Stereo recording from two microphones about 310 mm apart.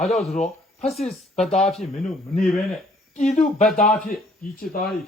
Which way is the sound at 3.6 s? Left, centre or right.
Left.